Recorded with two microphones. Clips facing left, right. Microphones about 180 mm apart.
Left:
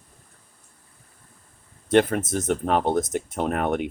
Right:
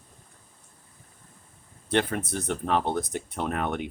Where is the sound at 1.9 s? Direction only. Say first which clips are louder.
Left 7 dB; 45° left (ahead or behind).